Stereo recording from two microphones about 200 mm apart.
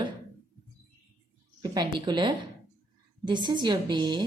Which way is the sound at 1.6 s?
20° right (ahead or behind).